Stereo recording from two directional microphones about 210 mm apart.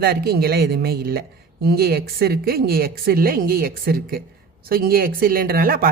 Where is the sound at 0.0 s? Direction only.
50° right (ahead or behind).